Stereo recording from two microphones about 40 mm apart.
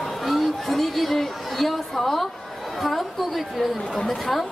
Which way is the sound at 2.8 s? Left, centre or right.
Centre.